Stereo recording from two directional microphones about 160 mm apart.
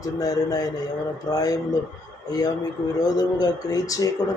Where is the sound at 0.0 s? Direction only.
25° left (ahead or behind).